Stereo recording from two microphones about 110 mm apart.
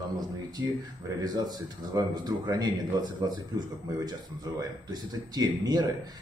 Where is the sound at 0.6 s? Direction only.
35° right (ahead or behind).